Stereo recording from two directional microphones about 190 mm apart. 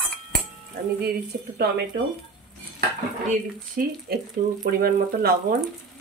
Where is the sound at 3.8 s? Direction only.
45° right (ahead or behind).